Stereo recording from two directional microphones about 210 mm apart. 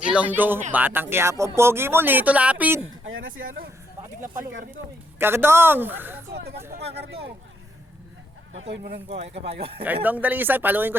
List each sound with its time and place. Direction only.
0.0 s speech: 5° right (ahead or behind)
3.1 s speech: 70° right (ahead or behind)
5.2 s speech: 10° right (ahead or behind)
6.3 s speech: 50° right (ahead or behind)
8.7 s speech: 55° right (ahead or behind)
9.8 s speech: 10° right (ahead or behind)